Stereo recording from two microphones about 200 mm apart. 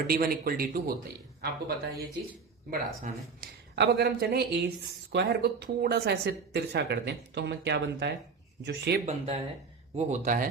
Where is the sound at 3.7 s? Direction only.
55° right (ahead or behind).